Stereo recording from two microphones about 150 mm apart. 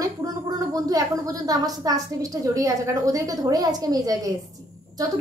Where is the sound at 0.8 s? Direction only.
25° right (ahead or behind).